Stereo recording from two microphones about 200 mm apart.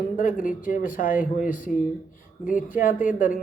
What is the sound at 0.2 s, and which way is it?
Speech, 40° left (ahead or behind).